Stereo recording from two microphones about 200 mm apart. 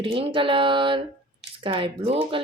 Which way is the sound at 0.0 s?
25° right (ahead or behind).